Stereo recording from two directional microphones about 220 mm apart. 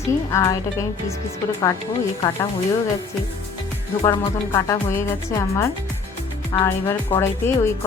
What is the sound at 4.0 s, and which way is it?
Speech, 20° left (ahead or behind).